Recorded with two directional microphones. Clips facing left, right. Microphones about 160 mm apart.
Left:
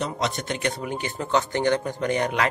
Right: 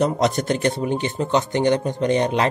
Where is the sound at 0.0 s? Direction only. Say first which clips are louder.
Right 8 dB; 45° right (ahead or behind).